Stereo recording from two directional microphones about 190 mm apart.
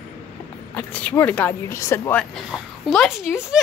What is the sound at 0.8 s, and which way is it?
Speech, 5° left (ahead or behind).